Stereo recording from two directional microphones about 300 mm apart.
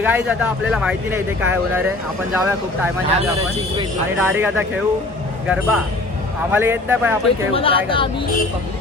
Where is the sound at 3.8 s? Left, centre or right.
Centre.